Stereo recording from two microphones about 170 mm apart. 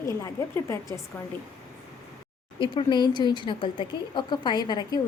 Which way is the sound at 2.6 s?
30° left (ahead or behind).